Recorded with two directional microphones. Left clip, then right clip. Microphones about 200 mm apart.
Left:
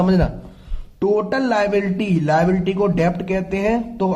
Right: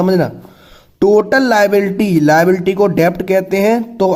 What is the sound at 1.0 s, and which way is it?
Speech, 70° right (ahead or behind).